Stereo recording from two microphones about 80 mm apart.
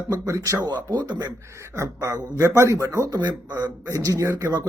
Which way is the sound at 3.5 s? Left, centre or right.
Right.